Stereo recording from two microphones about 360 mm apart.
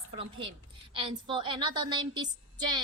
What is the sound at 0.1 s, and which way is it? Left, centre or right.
A woman's voice, centre.